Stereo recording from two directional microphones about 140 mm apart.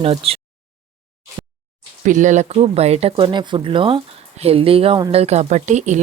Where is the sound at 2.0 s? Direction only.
60° right (ahead or behind).